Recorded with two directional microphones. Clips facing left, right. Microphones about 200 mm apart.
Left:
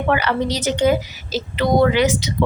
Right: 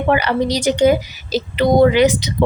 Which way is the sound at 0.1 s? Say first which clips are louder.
Right 3 dB; 15° right (ahead or behind).